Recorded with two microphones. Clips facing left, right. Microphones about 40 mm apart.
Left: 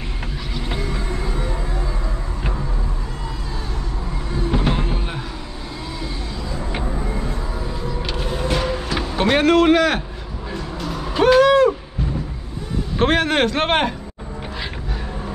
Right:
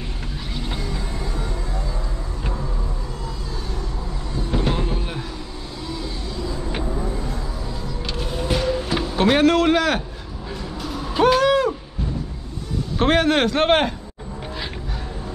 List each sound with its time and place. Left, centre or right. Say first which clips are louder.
0.7 s music: left 3 dB; centre
4.3 s music: left 2 dB; left
6.8 s vehicle: left 1 dB; left
8.1 s music: left 1 dB; centre
9.0 s speech: even; centre
10.8 s owl: even; centre
13.0 s a man's voice: even; centre